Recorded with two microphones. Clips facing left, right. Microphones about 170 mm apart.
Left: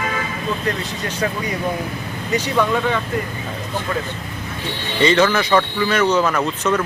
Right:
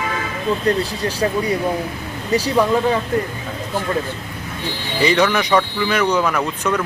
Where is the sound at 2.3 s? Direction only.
35° right (ahead or behind).